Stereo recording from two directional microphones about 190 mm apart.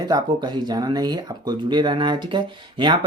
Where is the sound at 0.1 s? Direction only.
20° right (ahead or behind).